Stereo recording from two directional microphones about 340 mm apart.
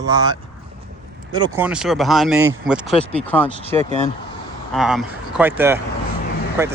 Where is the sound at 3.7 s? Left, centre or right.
Centre.